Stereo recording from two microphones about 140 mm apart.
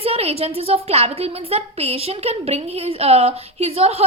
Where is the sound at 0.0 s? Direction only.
45° right (ahead or behind).